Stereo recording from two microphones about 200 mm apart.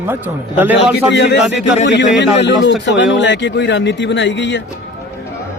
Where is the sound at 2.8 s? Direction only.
60° left (ahead or behind).